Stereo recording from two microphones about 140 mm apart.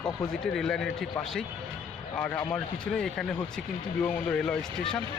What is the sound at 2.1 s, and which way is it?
Speech, 5° left (ahead or behind).